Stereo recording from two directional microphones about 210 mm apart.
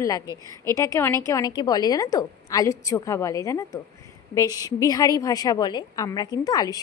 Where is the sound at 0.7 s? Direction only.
15° left (ahead or behind).